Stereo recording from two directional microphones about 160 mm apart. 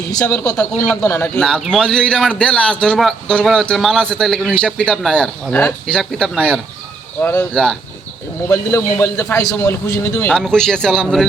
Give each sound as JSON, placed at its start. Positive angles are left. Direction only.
{"t": 0.2, "sound": "a man's voice", "side_deg": 15}
{"t": 7.2, "sound": "a man's voice", "side_deg": 15}
{"t": 7.5, "sound": "a man's voice", "side_deg": 5}
{"t": 8.4, "sound": "a man's voice", "side_deg": 20}
{"t": 10.3, "sound": "a man's voice", "side_deg": 5}